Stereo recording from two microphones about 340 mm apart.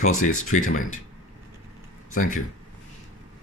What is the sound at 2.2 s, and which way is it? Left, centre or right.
Speech, left.